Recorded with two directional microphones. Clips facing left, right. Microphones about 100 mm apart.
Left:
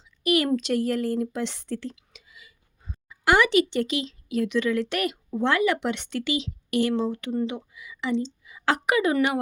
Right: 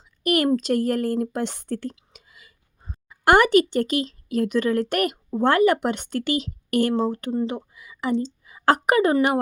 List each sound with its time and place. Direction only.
0.2 s speech: 50° right (ahead or behind)
2.0 s a sound: 45° right (ahead or behind)
5.4 s a woman's voice: 45° right (ahead or behind)